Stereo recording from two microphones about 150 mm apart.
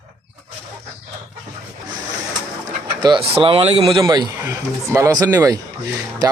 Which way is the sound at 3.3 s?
40° right (ahead or behind).